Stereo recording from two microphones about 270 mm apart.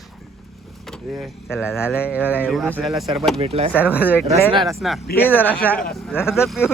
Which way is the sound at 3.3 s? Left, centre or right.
Right.